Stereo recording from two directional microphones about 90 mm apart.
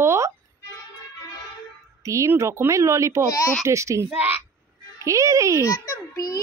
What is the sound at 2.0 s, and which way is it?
Speech, 35° right (ahead or behind).